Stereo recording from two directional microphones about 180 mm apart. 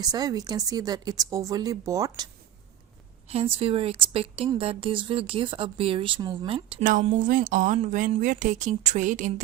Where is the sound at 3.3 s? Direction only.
30° right (ahead or behind).